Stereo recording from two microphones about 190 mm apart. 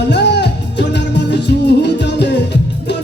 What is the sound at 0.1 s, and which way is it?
Music, 65° left (ahead or behind).